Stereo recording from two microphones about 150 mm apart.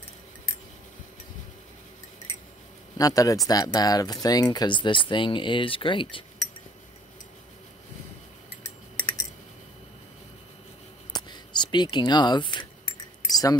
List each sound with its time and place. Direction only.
3.0 s speech: 25° left (ahead or behind)
11.1 s keys jangling: 30° left (ahead or behind)